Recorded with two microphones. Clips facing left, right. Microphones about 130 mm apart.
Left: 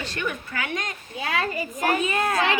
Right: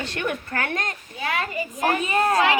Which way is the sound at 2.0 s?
35° right (ahead or behind).